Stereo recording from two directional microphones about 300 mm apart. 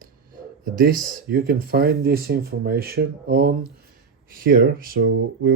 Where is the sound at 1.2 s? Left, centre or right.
Right.